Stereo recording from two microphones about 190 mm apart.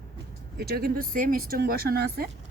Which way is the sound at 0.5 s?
55° right (ahead or behind).